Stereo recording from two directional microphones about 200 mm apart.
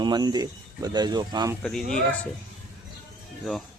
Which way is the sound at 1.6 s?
5° left (ahead or behind).